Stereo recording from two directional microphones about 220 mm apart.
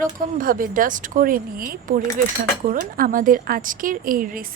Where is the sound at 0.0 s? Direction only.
40° right (ahead or behind).